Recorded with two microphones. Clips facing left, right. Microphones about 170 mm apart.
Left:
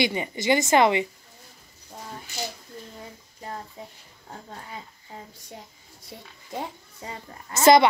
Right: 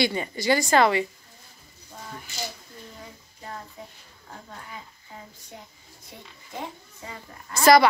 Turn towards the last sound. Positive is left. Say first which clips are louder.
# left 1 dB
turn(degrees=25)  # may be behind; listen again after turning